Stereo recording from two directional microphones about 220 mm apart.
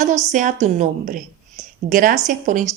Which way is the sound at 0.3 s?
35° right (ahead or behind).